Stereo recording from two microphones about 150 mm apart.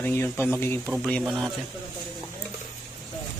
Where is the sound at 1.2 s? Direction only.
Centre (ahead or behind).